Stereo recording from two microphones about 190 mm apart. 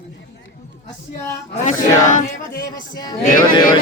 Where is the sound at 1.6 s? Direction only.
40° left (ahead or behind).